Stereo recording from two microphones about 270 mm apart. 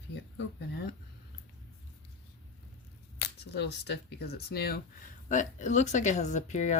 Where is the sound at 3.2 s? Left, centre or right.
Left.